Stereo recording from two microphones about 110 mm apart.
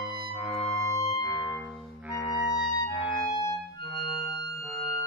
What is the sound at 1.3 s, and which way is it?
Music, 10° right (ahead or behind).